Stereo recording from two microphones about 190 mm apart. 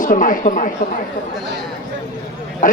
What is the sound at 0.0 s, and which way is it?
Speech, 45° left (ahead or behind).